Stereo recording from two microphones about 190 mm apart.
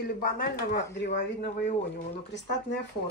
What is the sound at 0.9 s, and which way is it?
Speech, 60° left (ahead or behind).